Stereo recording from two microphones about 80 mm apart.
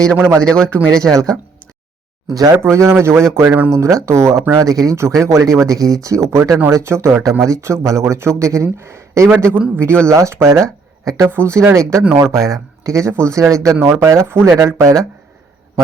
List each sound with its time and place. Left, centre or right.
0.1 s a man's voice: right
0.3 s a man's voice: centre
2.6 s a man's voice: right